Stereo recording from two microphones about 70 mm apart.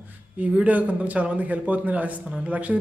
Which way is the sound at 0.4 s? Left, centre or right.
Right.